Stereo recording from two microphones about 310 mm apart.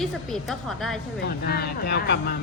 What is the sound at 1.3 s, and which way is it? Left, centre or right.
Speech, left.